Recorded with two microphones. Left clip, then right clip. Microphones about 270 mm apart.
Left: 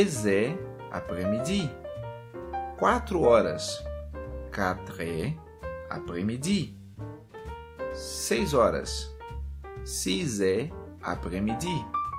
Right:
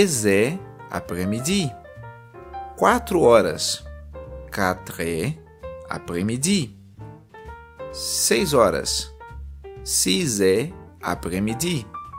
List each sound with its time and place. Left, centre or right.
0.0 s speech: right
2.7 s speech: right
8.1 s speech: right